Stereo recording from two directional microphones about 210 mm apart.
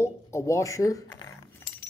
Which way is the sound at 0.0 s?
15° left (ahead or behind).